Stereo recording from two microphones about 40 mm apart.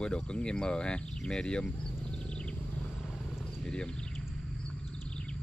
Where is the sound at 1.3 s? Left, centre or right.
Left.